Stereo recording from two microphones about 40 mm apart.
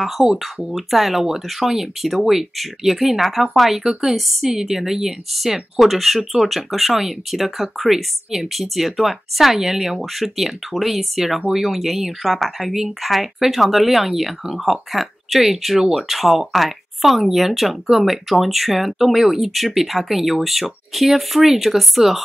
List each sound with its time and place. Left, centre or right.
0.2 s speech: right
0.7 s speech: centre